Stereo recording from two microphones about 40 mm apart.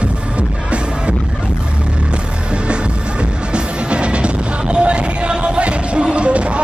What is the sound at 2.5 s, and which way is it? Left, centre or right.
Music, right.